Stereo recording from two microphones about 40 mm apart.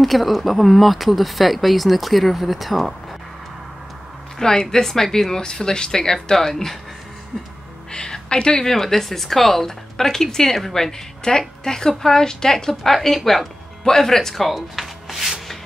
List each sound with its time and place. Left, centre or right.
0.0 s speech: centre
4.4 s speech: centre
7.9 s music: left
8.6 s speech: centre